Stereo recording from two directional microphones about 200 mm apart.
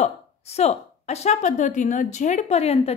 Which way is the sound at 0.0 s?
30° left (ahead or behind).